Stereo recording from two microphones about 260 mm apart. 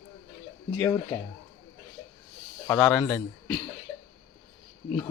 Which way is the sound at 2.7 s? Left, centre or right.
Centre.